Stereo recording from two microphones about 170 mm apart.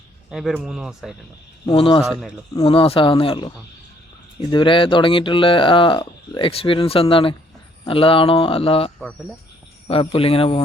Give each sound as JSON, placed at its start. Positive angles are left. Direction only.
{"t": 0.3, "sound": "speech", "side_deg": -5}
{"t": 1.6, "sound": "speech", "side_deg": 30}